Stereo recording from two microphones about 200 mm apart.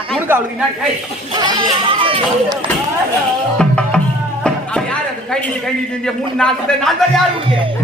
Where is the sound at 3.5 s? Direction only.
5° left (ahead or behind).